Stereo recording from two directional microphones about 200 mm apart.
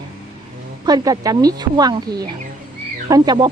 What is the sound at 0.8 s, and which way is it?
Speech, 20° right (ahead or behind).